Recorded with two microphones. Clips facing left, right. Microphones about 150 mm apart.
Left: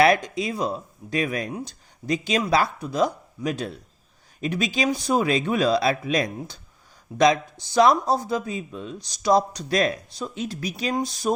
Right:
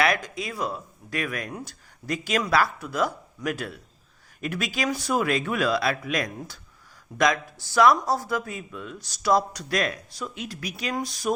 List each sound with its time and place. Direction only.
0.0 s speech: 25° left (ahead or behind)
7.6 s speech: 20° left (ahead or behind)